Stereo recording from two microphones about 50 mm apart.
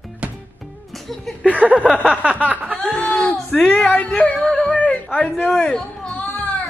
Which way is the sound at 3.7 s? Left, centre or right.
Left.